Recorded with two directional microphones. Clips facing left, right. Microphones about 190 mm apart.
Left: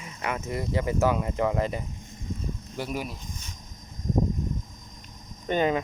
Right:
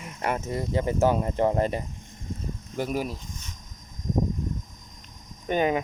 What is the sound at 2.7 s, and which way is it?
Speech, 45° right (ahead or behind).